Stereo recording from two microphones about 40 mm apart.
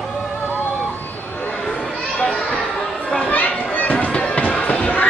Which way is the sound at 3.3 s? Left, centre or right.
Left.